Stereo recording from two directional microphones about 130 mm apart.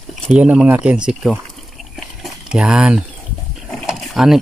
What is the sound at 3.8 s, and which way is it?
Mechanisms, 5° right (ahead or behind).